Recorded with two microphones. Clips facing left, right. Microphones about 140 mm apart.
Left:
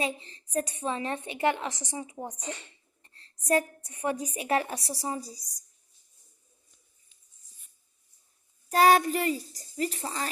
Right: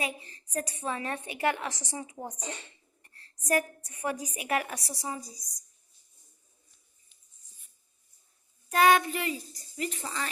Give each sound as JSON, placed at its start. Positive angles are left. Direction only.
{"t": 0.0, "sound": "a woman's voice", "side_deg": 25}
{"t": 8.7, "sound": "a child's voice", "side_deg": 35}